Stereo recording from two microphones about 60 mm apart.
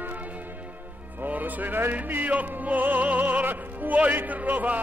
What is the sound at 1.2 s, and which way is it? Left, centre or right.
Music, right.